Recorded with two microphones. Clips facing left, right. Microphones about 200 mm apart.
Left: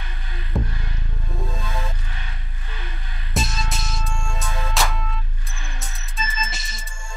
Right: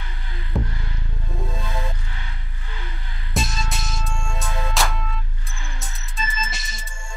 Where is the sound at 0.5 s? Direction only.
Centre (ahead or behind).